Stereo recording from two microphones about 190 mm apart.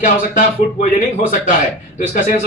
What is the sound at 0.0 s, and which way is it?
A man's voice, 40° left (ahead or behind).